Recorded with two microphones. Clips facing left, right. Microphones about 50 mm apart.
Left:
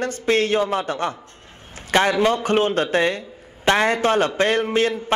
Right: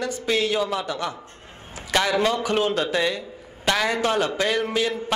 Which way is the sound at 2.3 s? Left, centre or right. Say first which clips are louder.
Left 3 dB; left.